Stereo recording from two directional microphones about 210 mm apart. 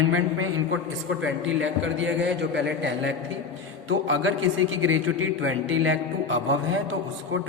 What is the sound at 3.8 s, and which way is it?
A man's voice, 75° right (ahead or behind).